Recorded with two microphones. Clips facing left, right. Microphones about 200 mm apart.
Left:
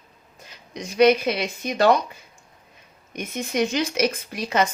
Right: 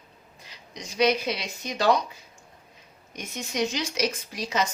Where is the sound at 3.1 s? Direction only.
55° left (ahead or behind).